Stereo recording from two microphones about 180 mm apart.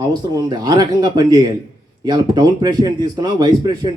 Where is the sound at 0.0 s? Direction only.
20° right (ahead or behind).